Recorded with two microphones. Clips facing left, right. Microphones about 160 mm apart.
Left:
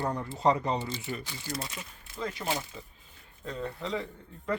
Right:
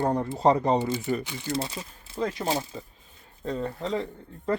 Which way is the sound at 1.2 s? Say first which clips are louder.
Right 7 dB; 20° right (ahead or behind).